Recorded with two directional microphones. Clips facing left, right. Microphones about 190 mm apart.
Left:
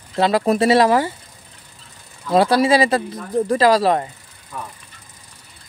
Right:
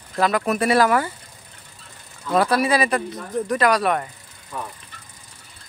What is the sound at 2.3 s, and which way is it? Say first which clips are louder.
Speech: left 4 dB; 25° left (ahead or behind).